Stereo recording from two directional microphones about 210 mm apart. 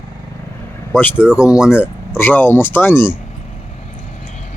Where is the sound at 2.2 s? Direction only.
10° left (ahead or behind).